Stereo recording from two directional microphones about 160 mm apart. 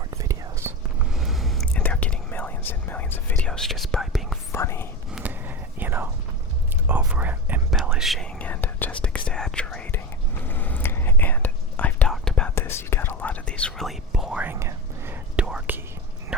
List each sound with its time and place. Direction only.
0.1 s whispering: 20° right (ahead or behind)
0.9 s whispering: centre (ahead or behind)
4.5 s whispering: 15° left (ahead or behind)
5.1 s whispering: 10° right (ahead or behind)
12.5 s whispering: 15° left (ahead or behind); by 15.8 s 10° right (ahead or behind)